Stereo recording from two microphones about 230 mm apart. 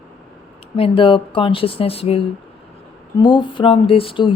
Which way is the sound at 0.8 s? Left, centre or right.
Left.